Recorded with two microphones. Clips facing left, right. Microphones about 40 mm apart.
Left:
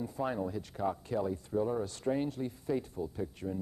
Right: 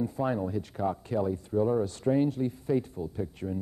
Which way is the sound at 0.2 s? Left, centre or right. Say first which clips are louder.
Right 2 dB; right.